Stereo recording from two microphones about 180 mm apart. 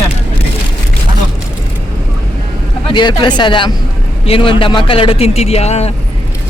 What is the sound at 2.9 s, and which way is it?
A man's voice, 25° left (ahead or behind).